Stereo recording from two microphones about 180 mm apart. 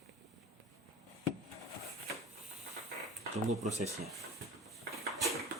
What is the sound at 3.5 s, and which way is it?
Speech, 40° right (ahead or behind).